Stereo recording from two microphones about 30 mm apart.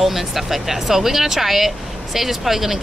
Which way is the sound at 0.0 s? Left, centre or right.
Centre.